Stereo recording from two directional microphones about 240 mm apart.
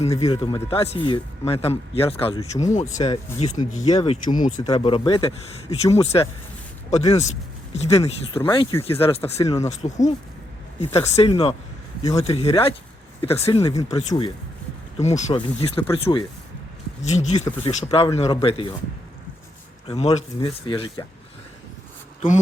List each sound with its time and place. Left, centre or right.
0.3 s speech: centre
19.9 s speech: left